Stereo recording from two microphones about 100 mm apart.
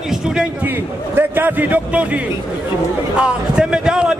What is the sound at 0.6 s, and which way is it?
A man's voice, 20° right (ahead or behind).